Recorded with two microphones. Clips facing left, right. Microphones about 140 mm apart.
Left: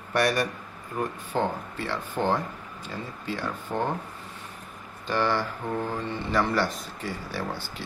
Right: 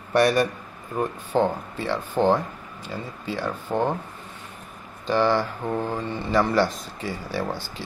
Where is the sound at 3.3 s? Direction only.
25° right (ahead or behind).